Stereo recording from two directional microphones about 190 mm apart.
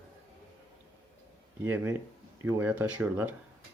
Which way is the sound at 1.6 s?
10° right (ahead or behind).